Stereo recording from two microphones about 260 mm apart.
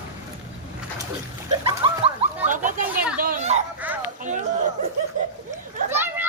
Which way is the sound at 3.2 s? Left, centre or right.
Right.